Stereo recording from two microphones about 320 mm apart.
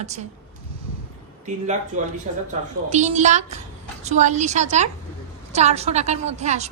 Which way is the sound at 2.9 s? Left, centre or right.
Right.